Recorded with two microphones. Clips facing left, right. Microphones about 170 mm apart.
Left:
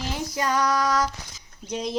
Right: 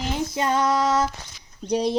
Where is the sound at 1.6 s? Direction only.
35° right (ahead or behind).